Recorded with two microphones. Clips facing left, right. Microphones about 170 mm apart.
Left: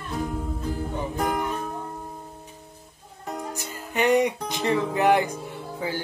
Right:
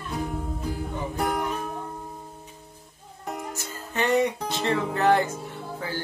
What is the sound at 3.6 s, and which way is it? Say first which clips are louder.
Music: left 4 dB; 15° left (ahead or behind).